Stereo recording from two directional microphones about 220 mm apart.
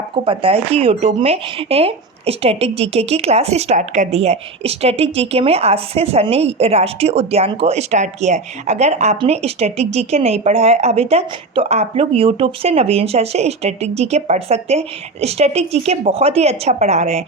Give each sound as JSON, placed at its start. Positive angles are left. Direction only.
{"t": 0.1, "sound": "speech", "side_deg": -25}